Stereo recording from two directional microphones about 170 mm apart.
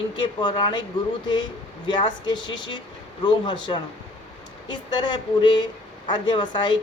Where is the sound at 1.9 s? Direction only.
25° left (ahead or behind).